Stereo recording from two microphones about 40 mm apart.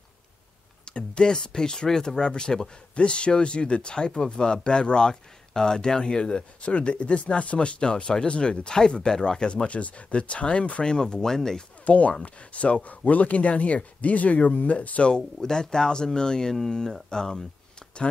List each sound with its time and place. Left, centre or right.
0.8 s speech: left
11.8 s speech: left
15.4 s speech: centre